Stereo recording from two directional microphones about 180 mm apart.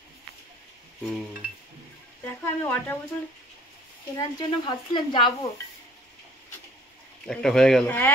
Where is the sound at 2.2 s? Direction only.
10° left (ahead or behind).